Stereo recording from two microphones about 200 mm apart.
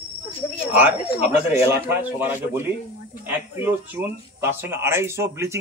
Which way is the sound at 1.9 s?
10° right (ahead or behind).